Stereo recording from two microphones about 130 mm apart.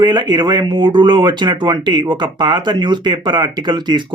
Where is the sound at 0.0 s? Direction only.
35° right (ahead or behind).